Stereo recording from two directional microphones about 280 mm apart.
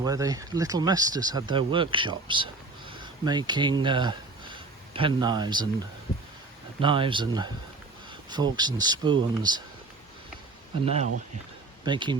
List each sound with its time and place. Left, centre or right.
0.0 s speech: centre
6.8 s speech: centre
10.8 s speech: right